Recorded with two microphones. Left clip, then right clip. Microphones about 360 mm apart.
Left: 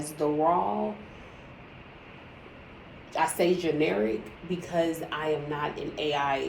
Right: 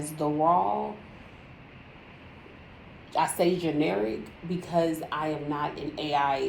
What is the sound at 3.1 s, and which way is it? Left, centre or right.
A woman's voice, right.